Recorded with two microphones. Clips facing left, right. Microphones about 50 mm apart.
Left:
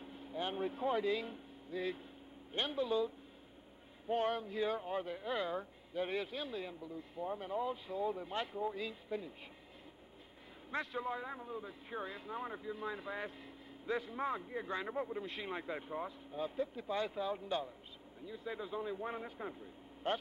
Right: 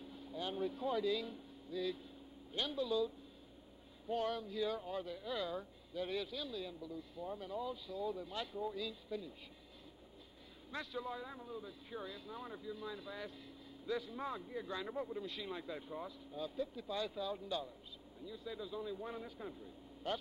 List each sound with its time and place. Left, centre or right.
0.0 s speech: left
4.1 s speech: left
10.7 s speech: left